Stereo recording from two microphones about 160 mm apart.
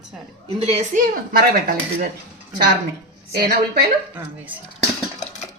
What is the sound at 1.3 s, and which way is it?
Speech, 70° right (ahead or behind).